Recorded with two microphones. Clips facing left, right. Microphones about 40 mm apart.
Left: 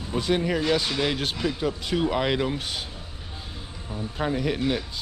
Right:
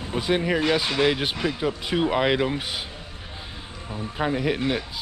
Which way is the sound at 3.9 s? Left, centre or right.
Centre.